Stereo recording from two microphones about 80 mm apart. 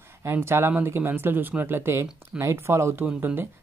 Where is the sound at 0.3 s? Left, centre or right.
Right.